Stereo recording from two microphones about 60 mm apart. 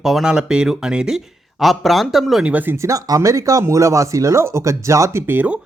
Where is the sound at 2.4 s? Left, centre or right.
Right.